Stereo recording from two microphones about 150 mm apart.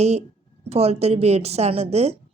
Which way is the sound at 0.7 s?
45° right (ahead or behind).